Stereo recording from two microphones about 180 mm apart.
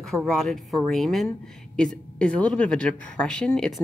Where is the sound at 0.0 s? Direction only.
Centre (ahead or behind).